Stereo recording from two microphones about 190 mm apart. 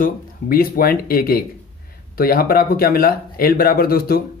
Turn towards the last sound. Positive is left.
turn(degrees=50)  # may be behind; listen again after turning